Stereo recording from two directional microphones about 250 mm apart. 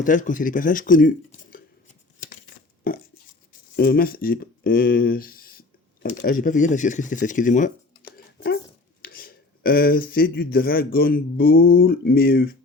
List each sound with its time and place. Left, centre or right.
0.0 s speech: left
2.8 s a sound: left
3.8 s speech: left
9.0 s speech: left